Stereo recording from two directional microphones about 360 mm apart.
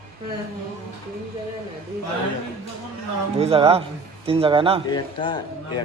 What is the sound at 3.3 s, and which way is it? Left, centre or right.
Speech, centre.